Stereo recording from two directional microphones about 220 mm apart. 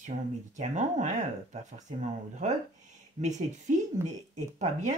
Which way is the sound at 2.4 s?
30° right (ahead or behind).